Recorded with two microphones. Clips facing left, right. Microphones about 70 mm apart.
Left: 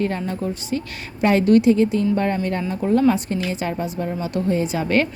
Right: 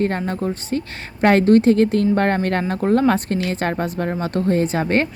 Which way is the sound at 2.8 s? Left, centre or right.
Right.